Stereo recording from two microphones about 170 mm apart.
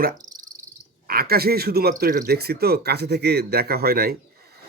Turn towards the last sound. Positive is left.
turn(degrees=-65)  # may be behind; listen again after turning